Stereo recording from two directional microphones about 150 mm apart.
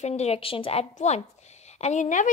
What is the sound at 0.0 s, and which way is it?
A woman's voice, 45° left (ahead or behind).